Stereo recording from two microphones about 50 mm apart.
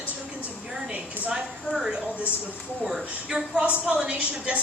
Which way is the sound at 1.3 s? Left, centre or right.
Centre.